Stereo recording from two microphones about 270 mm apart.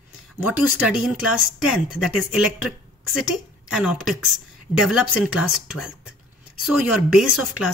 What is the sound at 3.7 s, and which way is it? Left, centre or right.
Speech, centre.